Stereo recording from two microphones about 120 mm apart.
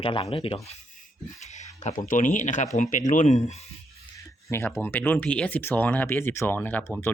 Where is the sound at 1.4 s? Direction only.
65° left (ahead or behind).